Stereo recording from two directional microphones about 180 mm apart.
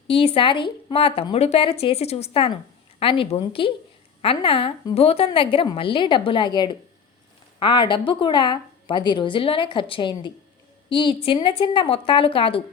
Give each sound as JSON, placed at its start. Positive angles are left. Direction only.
{"t": 0.1, "sound": "a woman's voice", "side_deg": 30}